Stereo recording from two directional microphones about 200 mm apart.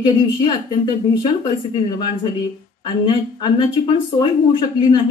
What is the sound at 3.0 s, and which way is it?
Speech, 20° left (ahead or behind).